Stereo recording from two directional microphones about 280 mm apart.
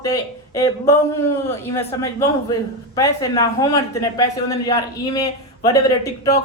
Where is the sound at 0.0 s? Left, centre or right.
Centre.